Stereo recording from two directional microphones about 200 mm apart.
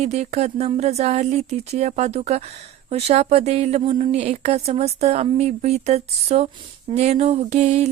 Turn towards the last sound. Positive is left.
turn(degrees=-35)  # may be behind; listen again after turning